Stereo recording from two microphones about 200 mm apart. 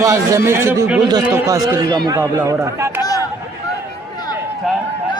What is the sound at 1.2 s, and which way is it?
A man's voice, 15° right (ahead or behind).